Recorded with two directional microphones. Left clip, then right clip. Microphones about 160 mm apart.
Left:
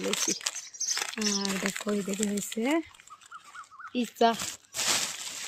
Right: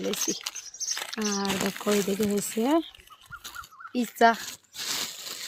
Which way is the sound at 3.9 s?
25° right (ahead or behind).